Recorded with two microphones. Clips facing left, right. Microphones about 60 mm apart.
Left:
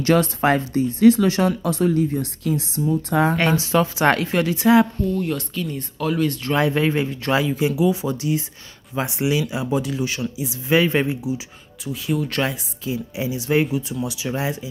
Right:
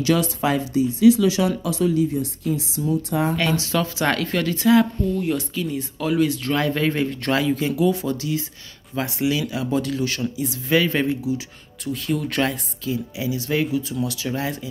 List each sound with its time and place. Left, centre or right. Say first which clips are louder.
0.0 s speech: left 3 dB; left
2.4 s speech: left 4 dB; left
3.3 s speech: left 3 dB; left
5.1 s speech: even; centre
6.5 s speech: left 2 dB; centre
10.7 s speech: left 2 dB; left
11.8 s speech: left 1 dB; centre
12.8 s speech: even; left